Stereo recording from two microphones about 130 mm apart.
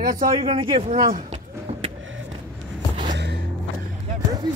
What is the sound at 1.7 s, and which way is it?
Vehicle, 50° right (ahead or behind).